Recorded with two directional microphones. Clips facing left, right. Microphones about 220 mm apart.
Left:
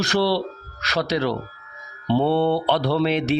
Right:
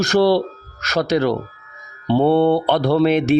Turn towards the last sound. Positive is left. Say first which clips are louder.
# right 6 dB
turn(degrees=-50)  # may be behind; listen again after turning